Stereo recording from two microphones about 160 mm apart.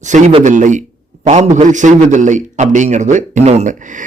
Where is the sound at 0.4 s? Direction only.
50° right (ahead or behind).